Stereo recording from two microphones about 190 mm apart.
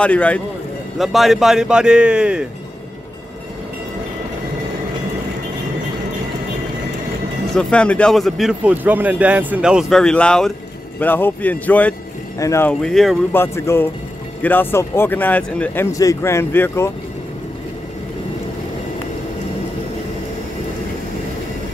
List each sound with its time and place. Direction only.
0.0 s a man's voice: 5° left (ahead or behind)
7.5 s a man's voice: 5° left (ahead or behind)
13.3 s speech: 10° left (ahead or behind)